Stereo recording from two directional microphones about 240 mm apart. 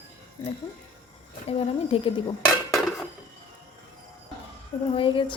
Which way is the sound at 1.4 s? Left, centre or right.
Left.